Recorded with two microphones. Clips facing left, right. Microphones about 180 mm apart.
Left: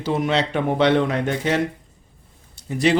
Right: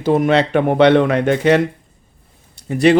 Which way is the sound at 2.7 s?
60° right (ahead or behind).